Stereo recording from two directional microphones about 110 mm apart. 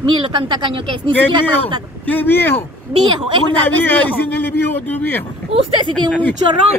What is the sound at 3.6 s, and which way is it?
A man's voice, 15° left (ahead or behind).